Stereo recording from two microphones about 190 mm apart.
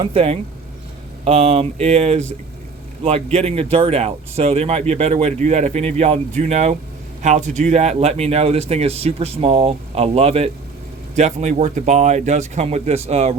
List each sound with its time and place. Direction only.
0.0 s speech: 30° right (ahead or behind)